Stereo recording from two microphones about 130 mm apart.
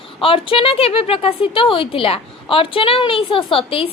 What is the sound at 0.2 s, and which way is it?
A woman's voice, 45° left (ahead or behind).